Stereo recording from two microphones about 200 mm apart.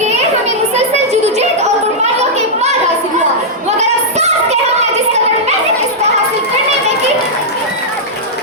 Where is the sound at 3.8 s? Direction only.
35° right (ahead or behind).